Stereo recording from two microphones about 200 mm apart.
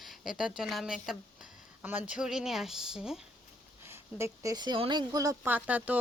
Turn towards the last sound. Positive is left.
turn(degrees=-10)  # may be behind; listen again after turning